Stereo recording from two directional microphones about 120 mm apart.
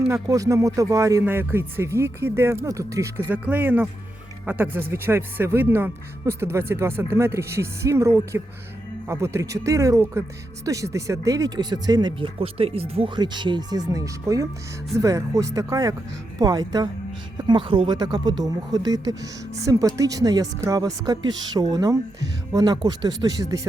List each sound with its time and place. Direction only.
0.1 s speech: 25° right (ahead or behind)
3.2 s speech: 15° right (ahead or behind); by 13.1 s 55° right (ahead or behind)
13.1 s speech: 40° right (ahead or behind)